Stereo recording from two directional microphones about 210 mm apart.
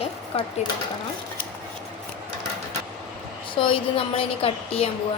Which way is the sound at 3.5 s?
25° left (ahead or behind).